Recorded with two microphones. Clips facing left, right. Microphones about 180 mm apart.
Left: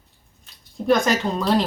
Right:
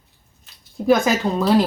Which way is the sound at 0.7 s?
Centre (ahead or behind).